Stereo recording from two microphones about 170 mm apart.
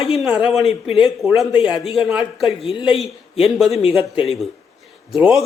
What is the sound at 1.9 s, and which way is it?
A man's voice, 5° right (ahead or behind).